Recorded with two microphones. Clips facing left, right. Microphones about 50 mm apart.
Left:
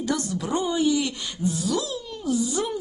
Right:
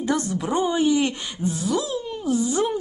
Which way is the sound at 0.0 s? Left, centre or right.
Right.